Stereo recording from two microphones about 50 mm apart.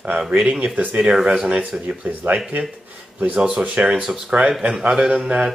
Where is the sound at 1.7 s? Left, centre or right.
Centre.